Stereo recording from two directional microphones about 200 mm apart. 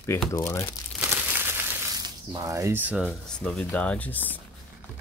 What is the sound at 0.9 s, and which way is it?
Crumpling, 10° right (ahead or behind).